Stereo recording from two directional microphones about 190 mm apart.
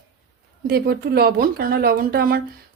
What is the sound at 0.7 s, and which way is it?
A woman's voice, 55° right (ahead or behind).